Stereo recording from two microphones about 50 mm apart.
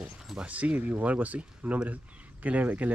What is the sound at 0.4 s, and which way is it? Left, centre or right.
Speech, right.